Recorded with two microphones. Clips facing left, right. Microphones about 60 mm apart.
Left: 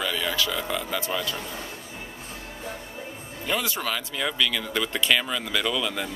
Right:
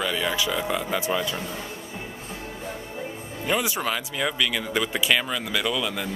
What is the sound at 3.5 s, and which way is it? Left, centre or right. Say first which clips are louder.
Speech: right 2 dB; centre.